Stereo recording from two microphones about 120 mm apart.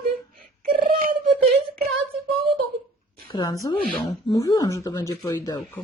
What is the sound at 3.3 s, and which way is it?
A woman's voice, 30° left (ahead or behind).